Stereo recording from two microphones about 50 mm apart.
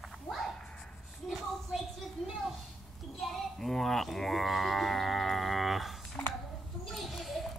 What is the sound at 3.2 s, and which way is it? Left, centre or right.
Music, centre.